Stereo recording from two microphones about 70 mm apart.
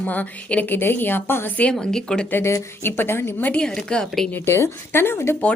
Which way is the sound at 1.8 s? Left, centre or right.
Centre.